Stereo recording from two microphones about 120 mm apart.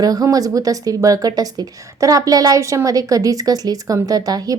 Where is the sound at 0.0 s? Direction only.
30° right (ahead or behind).